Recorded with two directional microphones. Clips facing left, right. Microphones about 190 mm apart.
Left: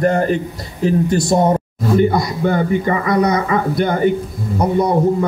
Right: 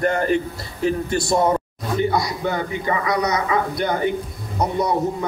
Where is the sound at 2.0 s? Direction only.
50° left (ahead or behind).